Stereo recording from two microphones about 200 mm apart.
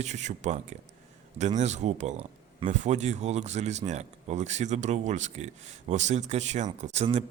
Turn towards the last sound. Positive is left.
turn(degrees=-30)  # may be behind; listen again after turning